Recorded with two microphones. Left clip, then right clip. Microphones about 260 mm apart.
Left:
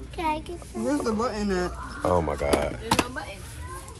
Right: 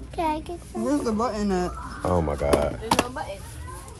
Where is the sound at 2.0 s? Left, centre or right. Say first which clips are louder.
Left 1 dB; centre.